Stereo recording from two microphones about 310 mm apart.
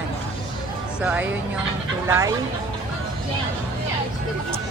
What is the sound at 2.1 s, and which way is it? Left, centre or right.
Speech, centre.